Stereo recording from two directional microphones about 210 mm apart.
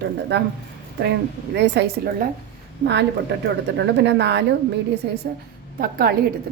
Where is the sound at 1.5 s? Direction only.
55° right (ahead or behind).